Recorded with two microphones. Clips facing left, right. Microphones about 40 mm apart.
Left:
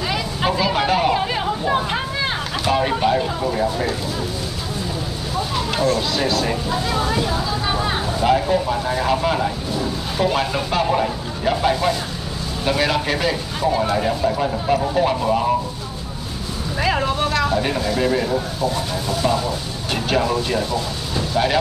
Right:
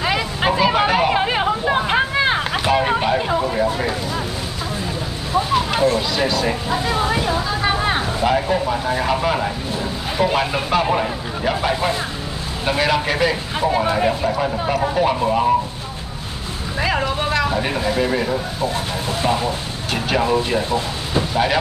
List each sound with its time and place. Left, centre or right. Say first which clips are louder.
0.0 s vehicle: right 2 dB; right
1.1 s vehicle: right 3 dB; right
5.5 s a sound: right 2 dB; centre
5.9 s speech: right 1 dB; centre
8.2 s speech: left 3 dB; centre
12.6 s speech: right 1 dB; centre
13.6 s speech: right 2 dB; right
14.2 s speech: even; centre
16.8 s a sound: even; centre
18.0 s speech: left 1 dB; centre
19.0 s speech: even; right
19.9 s speech: even; centre
20.2 s speech: right 2 dB; right